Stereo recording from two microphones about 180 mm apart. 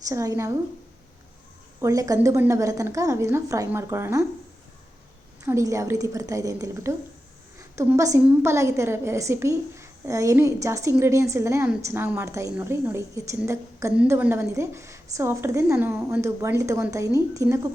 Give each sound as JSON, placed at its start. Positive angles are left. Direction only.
{"t": 0.1, "sound": "a woman's voice", "side_deg": -20}
{"t": 1.8, "sound": "a woman's voice", "side_deg": -20}
{"t": 5.4, "sound": "a woman's voice", "side_deg": -15}